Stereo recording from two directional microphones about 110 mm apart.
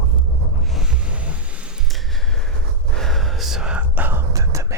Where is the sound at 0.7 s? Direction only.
5° right (ahead or behind).